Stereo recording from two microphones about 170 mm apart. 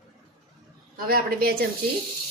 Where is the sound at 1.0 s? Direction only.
60° right (ahead or behind).